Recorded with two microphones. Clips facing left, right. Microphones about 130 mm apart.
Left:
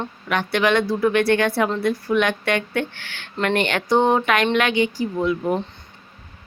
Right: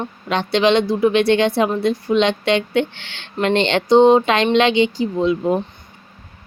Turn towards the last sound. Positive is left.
turn(degrees=-20)  # may be behind; listen again after turning